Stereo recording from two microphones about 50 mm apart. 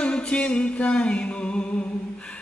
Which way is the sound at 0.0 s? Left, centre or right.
Centre.